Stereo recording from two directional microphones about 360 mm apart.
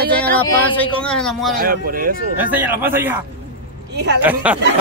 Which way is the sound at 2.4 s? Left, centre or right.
Centre.